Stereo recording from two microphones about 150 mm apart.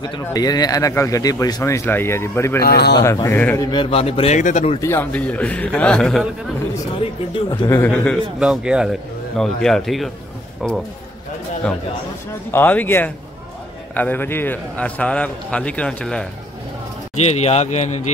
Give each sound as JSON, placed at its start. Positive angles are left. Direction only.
{"t": 0.0, "sound": "speech", "side_deg": 30}
{"t": 2.6, "sound": "speech", "side_deg": 90}
{"t": 3.0, "sound": "speech", "side_deg": 20}
{"t": 3.7, "sound": "speech", "side_deg": 40}
{"t": 4.4, "sound": "speech", "side_deg": 55}
{"t": 4.7, "sound": "a man's voice", "side_deg": 15}
{"t": 7.0, "sound": "speech", "side_deg": 35}
{"t": 7.8, "sound": "a man's voice", "side_deg": 5}
{"t": 8.4, "sound": "speech", "side_deg": -5}
{"t": 12.4, "sound": "a man's voice", "side_deg": 15}
{"t": 17.2, "sound": "speech", "side_deg": 45}